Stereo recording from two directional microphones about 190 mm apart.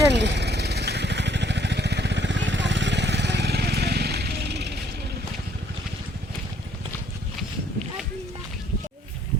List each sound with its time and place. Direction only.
0.1 s vehicle: 65° right (ahead or behind)